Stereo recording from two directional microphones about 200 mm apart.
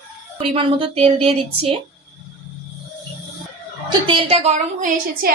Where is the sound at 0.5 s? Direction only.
25° right (ahead or behind).